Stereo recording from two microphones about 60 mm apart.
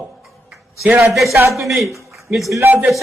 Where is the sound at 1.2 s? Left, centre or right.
Right.